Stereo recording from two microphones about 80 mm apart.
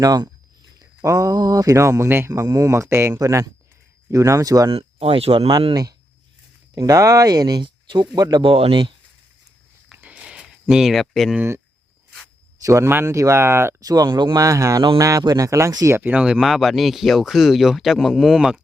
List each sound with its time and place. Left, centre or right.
0.0 s speech: right
2.0 s speech: right
2.3 s speech: right
3.2 s speech: right
6.7 s speech: right
8.1 s speech: right
9.9 s a sound: centre
11.0 s speech: centre
12.6 s speech: right
12.9 s speech: right
13.1 s speech: right
13.8 s speech: right
15.9 s speech: right
16.1 s speech: centre